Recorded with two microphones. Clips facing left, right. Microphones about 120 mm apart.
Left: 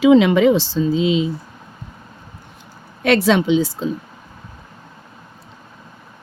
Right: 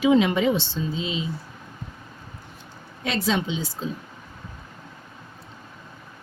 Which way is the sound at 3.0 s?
85° left.